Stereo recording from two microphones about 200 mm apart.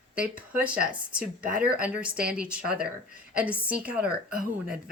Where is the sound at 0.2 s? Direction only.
5° right (ahead or behind).